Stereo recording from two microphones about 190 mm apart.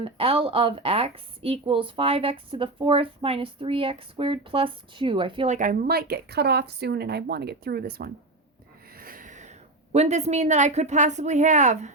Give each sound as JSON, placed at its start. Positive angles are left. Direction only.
{"t": 0.0, "sound": "a woman's voice", "side_deg": -30}
{"t": 5.5, "sound": "speech", "side_deg": -45}